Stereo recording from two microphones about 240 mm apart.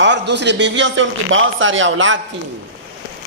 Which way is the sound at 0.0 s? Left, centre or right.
Right.